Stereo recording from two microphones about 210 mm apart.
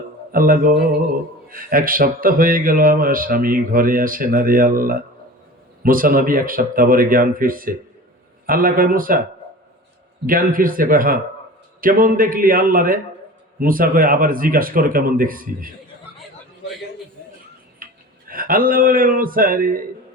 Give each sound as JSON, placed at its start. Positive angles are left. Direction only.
{"t": 0.3, "sound": "a man's voice", "side_deg": -40}
{"t": 10.2, "sound": "a man's voice", "side_deg": -40}
{"t": 17.8, "sound": "a sound", "side_deg": -40}
{"t": 18.3, "sound": "a man's voice", "side_deg": -40}